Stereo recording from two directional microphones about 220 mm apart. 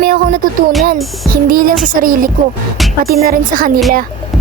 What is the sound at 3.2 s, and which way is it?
Speech, 40° right (ahead or behind).